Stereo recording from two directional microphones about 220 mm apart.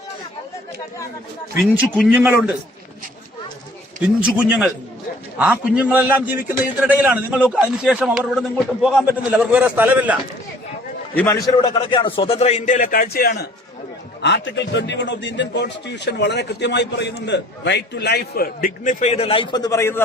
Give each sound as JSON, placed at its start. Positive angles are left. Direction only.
{"t": 2.0, "sound": "a man's voice", "side_deg": -10}
{"t": 4.2, "sound": "a man's voice", "side_deg": -5}
{"t": 11.1, "sound": "a man's voice", "side_deg": 10}